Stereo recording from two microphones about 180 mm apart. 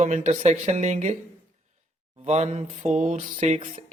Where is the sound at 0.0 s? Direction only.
40° right (ahead or behind).